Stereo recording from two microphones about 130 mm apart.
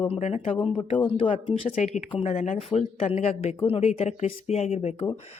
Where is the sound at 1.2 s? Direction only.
40° left (ahead or behind).